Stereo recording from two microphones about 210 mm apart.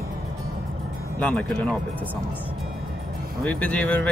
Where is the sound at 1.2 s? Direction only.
5° left (ahead or behind).